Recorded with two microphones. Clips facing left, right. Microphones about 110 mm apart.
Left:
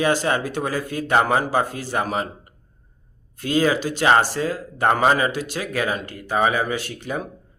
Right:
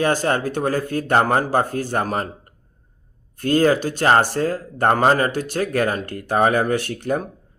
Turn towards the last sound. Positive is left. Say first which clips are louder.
# right 5 dB
turn(degrees=-55)  # may be behind; listen again after turning